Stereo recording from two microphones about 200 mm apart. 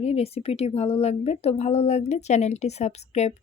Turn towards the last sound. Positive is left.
turn(degrees=35)  # may be behind; listen again after turning